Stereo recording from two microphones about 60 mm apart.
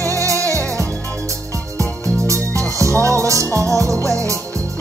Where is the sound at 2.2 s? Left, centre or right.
Right.